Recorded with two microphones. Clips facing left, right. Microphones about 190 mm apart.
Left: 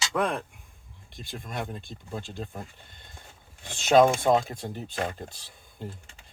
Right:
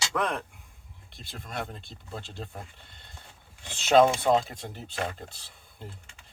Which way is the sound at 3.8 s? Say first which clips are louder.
Left 1 dB; 15° left (ahead or behind).